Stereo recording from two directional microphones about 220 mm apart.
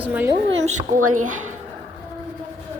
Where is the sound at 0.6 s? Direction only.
35° right (ahead or behind).